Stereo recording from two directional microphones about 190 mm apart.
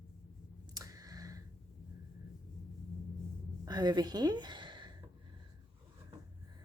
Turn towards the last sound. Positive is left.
turn(degrees=-25)  # may be behind; listen again after turning